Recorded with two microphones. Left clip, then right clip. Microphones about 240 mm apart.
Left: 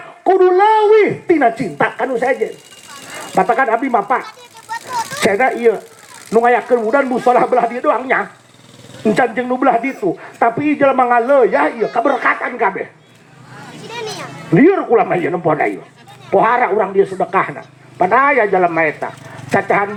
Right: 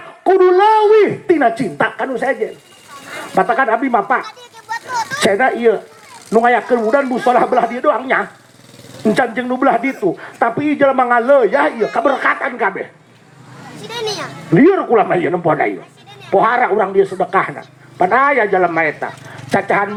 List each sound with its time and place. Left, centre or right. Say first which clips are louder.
0.3 s speech: even; right
4.7 s a sound: right 1 dB; right
6.3 s speech: even; right
13.9 s speech: right 4 dB; right